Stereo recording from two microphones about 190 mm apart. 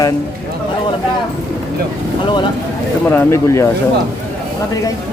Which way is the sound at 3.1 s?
15° left (ahead or behind).